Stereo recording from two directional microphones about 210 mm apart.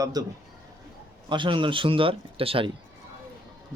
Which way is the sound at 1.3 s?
25° right (ahead or behind).